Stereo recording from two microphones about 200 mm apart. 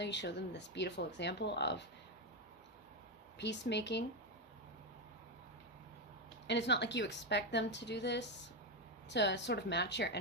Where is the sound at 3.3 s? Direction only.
60° left (ahead or behind).